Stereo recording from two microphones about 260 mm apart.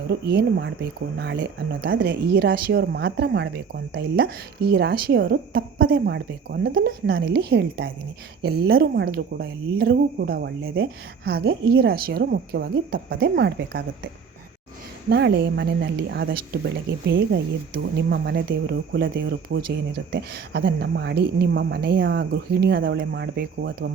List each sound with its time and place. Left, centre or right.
0.1 s speech: right
15.1 s speech: right